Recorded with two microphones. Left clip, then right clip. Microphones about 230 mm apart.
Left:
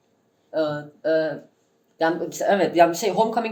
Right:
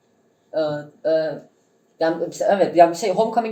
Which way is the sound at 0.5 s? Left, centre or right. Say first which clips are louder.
Right 2 dB; left.